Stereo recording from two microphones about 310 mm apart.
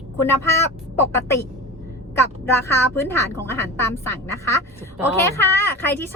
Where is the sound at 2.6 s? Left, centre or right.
Centre.